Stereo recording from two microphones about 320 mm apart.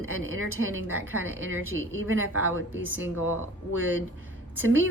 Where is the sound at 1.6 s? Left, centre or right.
Centre.